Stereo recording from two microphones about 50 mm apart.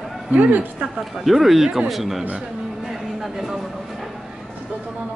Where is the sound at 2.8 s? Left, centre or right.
Centre.